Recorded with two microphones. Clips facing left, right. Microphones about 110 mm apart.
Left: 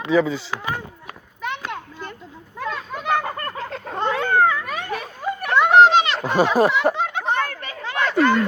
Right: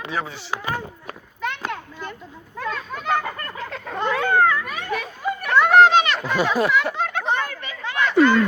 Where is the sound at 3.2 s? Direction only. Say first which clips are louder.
Left 2 dB; 35° left (ahead or behind).